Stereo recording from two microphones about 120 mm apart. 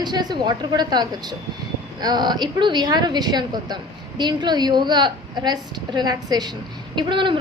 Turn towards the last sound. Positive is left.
turn(degrees=-45)  # may be behind; listen again after turning